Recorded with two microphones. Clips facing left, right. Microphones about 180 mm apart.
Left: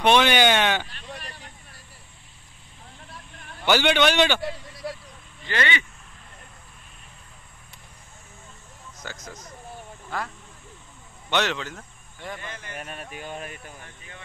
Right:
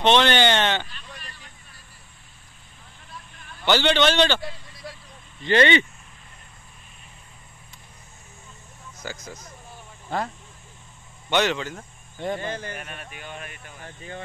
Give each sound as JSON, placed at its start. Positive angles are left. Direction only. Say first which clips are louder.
{"t": 0.0, "sound": "speech", "louder": "even", "side_deg": 10}
{"t": 1.1, "sound": "vehicle", "louder": "left 5 dB", "side_deg": 65}
{"t": 3.6, "sound": "a man's voice", "louder": "even", "side_deg": 10}
{"t": 5.4, "sound": "speech", "louder": "right 9 dB", "side_deg": -25}
{"t": 9.0, "sound": "speech", "louder": "right 3 dB", "side_deg": -5}
{"t": 10.0, "sound": "speech", "louder": "right 5 dB", "side_deg": -25}
{"t": 11.2, "sound": "speech", "louder": "right 3 dB", "side_deg": 0}
{"t": 12.2, "sound": "speech", "louder": "right 9 dB", "side_deg": -30}
{"t": 12.7, "sound": "speech", "louder": "left 2 dB", "side_deg": 35}